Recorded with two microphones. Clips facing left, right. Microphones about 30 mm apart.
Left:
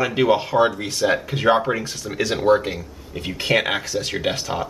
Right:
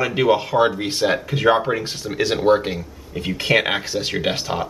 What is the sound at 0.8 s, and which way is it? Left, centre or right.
Speech, right.